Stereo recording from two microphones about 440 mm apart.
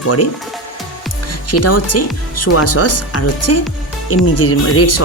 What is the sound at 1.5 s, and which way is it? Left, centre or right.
Speech, left.